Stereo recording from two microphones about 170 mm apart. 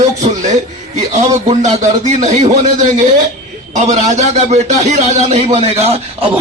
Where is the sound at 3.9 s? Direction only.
40° right (ahead or behind).